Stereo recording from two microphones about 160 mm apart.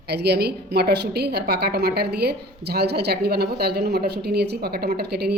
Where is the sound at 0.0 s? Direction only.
90° right.